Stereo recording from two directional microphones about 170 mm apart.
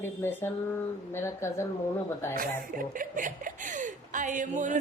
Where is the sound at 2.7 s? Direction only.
50° right (ahead or behind).